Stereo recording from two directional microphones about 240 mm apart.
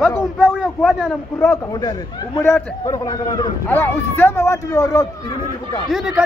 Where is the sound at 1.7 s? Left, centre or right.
Centre.